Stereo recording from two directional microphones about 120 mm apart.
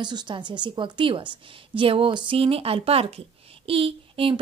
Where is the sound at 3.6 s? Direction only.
50° right (ahead or behind).